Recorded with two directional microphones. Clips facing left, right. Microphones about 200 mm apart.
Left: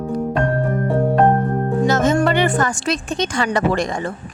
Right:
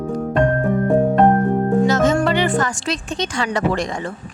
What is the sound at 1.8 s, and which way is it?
Music, 50° left (ahead or behind).